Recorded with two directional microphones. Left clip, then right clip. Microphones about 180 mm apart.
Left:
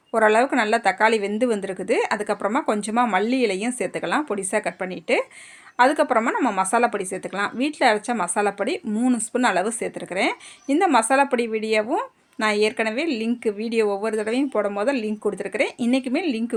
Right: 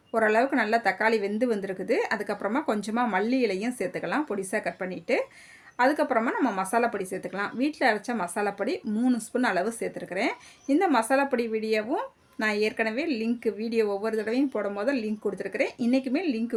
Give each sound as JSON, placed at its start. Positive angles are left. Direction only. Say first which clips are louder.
{"t": 0.1, "sound": "speech", "louder": "left 5 dB", "side_deg": 25}